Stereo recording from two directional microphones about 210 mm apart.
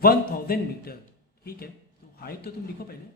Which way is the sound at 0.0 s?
45° left (ahead or behind).